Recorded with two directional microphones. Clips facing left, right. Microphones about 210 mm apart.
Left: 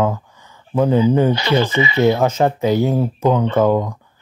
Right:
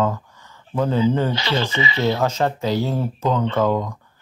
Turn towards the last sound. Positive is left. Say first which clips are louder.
# left 5 dB
turn(degrees=20)  # may be behind; listen again after turning